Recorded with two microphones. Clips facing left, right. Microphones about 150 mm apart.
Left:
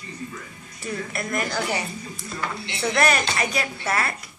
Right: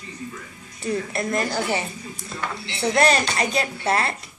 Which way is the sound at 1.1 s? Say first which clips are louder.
Even; 25° right (ahead or behind).